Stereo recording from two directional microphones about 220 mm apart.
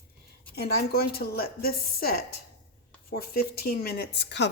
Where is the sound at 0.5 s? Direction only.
45° left (ahead or behind).